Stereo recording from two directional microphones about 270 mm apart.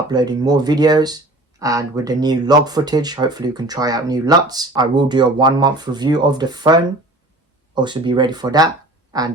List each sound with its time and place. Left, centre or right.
0.1 s speech: centre